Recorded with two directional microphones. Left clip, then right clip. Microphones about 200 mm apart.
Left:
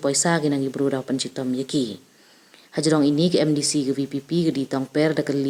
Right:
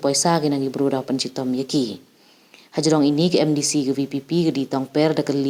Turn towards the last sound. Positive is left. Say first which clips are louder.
# right 2 dB
turn(degrees=-5)  # may be behind; listen again after turning